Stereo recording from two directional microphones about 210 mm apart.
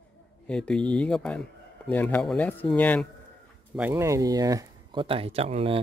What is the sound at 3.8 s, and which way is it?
Speech, 10° right (ahead or behind).